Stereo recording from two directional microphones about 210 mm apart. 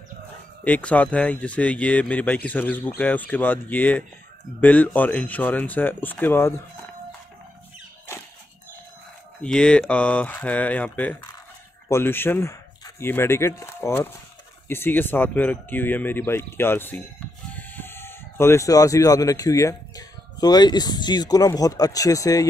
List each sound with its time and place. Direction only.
0.7 s speech: 5° left (ahead or behind)
9.4 s speech: 5° left (ahead or behind)